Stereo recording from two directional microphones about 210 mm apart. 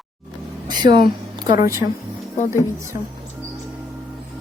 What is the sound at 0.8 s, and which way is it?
Speech, 40° left (ahead or behind).